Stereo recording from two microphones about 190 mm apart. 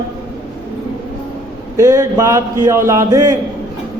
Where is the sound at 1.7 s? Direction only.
15° right (ahead or behind).